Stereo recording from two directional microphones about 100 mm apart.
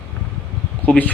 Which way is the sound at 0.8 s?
15° left (ahead or behind).